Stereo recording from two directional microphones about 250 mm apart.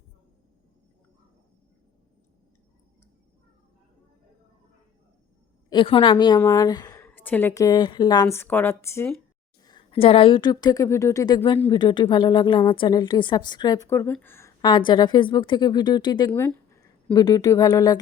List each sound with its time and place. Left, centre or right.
5.7 s a woman's voice: left